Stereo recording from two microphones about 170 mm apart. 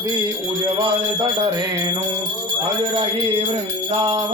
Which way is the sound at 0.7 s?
25° right (ahead or behind).